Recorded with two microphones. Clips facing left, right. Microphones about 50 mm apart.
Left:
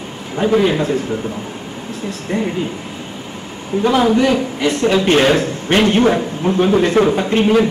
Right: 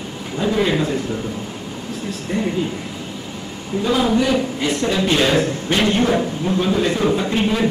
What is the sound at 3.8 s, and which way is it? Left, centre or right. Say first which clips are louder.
A man's voice: left 4 dB; left.